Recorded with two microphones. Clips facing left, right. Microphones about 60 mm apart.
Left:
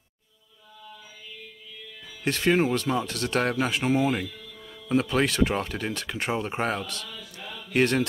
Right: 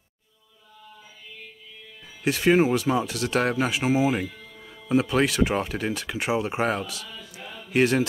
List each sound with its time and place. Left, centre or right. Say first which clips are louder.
2.2 s speech: right 3 dB; centre
4.3 s music: even; right
4.8 s speech: right 2 dB; centre
7.4 s chant: left 1 dB; right
7.7 s speech: right 2 dB; centre